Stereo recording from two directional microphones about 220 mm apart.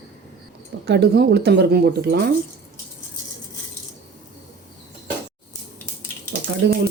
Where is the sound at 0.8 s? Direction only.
50° right (ahead or behind).